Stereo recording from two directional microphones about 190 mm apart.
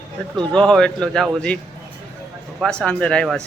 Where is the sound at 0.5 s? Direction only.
5° left (ahead or behind).